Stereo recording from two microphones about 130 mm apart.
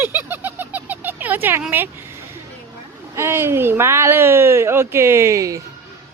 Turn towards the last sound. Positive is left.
turn(degrees=-25)  # may be behind; listen again after turning